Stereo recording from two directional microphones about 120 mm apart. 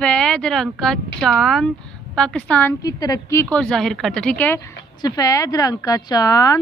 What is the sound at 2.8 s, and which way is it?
Speech, 30° left (ahead or behind).